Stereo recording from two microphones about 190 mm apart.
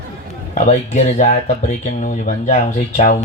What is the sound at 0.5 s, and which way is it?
Speech, 35° left (ahead or behind).